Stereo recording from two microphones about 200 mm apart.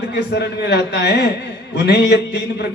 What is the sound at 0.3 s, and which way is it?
A man's voice, 55° left (ahead or behind).